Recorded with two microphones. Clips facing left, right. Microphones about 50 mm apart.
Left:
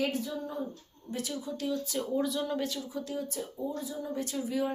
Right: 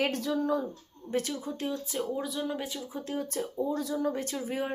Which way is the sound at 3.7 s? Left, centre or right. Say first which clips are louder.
Right 6 dB; right.